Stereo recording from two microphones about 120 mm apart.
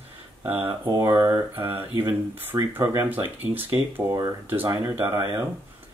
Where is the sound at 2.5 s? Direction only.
30° right (ahead or behind).